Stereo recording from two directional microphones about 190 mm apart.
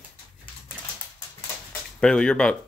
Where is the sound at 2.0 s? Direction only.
5° left (ahead or behind).